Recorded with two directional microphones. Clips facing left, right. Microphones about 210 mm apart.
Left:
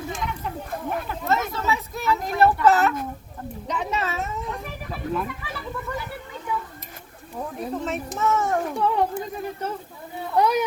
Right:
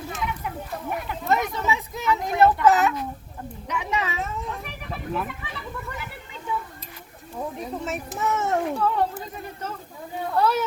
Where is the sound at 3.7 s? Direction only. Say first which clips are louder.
Left 1 dB; 10° right (ahead or behind).